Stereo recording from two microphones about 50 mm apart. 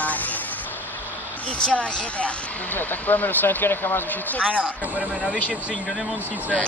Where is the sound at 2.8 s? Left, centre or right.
Left.